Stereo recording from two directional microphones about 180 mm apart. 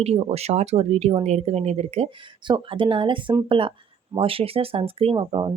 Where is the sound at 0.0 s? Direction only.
35° right (ahead or behind).